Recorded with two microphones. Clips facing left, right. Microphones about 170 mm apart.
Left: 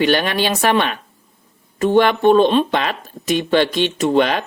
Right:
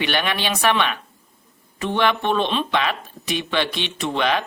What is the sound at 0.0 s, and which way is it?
Speech, 40° left (ahead or behind).